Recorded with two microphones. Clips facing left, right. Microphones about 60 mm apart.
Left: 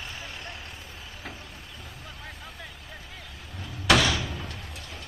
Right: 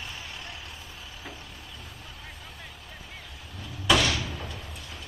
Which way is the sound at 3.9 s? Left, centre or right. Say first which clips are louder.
Left 2 dB; left.